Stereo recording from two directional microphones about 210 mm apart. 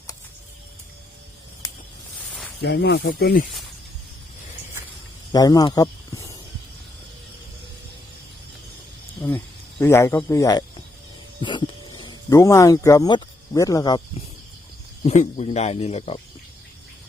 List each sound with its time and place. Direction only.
2.6 s speech: 55° left (ahead or behind)
5.3 s speech: 20° left (ahead or behind)
9.2 s speech: 10° left (ahead or behind)
11.3 s a sound: 25° left (ahead or behind)
11.9 s speech: 20° left (ahead or behind)
15.0 s speech: 35° left (ahead or behind)